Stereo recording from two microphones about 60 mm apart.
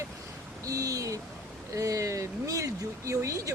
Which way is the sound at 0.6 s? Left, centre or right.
Right.